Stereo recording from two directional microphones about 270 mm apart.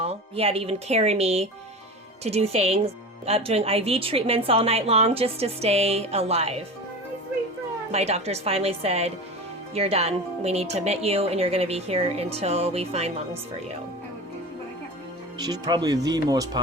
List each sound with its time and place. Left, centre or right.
0.0 s a woman's voice: right
7.9 s a woman's voice: right
15.4 s speech: centre